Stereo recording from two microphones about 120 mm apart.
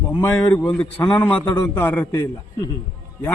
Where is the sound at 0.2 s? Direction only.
15° left (ahead or behind).